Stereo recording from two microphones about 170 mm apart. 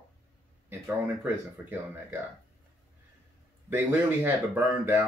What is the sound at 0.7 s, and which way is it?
Speech, 10° right (ahead or behind).